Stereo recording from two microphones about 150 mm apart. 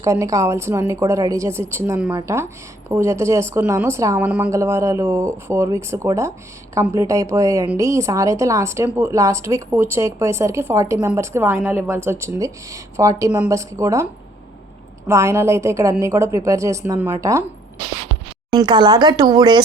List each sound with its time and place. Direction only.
0.0 s a woman's voice: 20° right (ahead or behind)
18.5 s a woman's voice: 30° right (ahead or behind)